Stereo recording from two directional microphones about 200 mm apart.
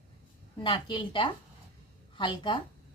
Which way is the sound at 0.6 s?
25° left (ahead or behind).